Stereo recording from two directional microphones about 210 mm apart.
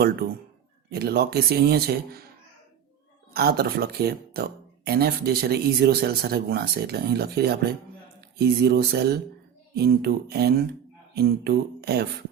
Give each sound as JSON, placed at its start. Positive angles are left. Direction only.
{"t": 0.9, "sound": "speech", "side_deg": -50}
{"t": 3.3, "sound": "speech", "side_deg": -50}
{"t": 11.1, "sound": "a sound", "side_deg": -50}